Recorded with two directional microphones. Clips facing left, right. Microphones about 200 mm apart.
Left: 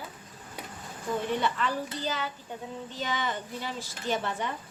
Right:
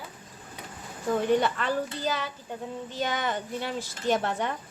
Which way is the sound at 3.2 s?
55° right (ahead or behind).